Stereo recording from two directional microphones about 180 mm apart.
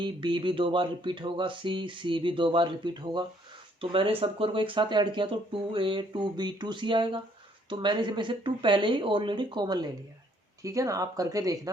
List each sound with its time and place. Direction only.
0.0 s speech: 25° right (ahead or behind)